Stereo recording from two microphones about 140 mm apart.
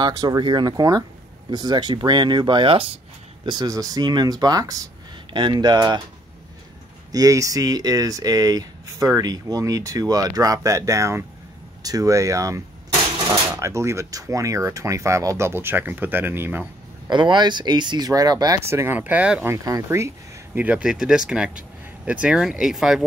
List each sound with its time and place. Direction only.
0.0 s speech: 25° right (ahead or behind)
3.4 s speech: 25° right (ahead or behind)
7.1 s speech: 25° right (ahead or behind)
17.1 s speech: 35° right (ahead or behind); by 19.5 s 10° right (ahead or behind)
19.5 s speech: 20° right (ahead or behind)
20.5 s speech: 10° right (ahead or behind)